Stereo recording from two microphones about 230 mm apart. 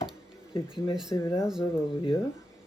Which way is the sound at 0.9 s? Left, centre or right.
Centre.